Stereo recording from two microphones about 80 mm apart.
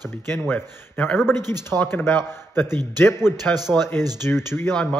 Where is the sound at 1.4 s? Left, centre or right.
Right.